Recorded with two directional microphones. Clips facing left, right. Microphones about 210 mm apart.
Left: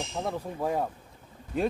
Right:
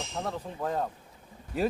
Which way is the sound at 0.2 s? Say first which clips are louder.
Left 2 dB; 10° left (ahead or behind).